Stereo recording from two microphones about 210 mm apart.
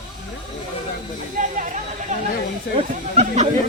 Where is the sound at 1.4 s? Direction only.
40° right (ahead or behind).